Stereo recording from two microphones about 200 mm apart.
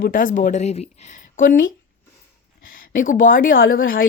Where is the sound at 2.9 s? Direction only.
45° left (ahead or behind).